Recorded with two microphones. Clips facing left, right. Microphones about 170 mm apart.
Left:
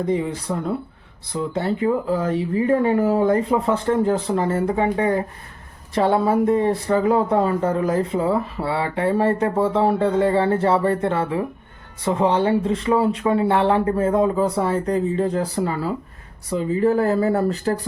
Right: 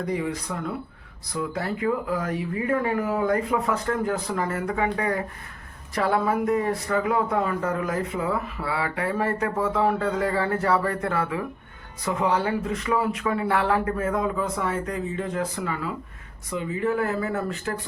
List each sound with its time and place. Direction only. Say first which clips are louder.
0.0 s speech: left 5 dB; 25° left (ahead or behind)